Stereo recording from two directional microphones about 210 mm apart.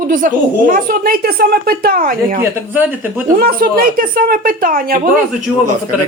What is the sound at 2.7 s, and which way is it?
Speech, 10° right (ahead or behind).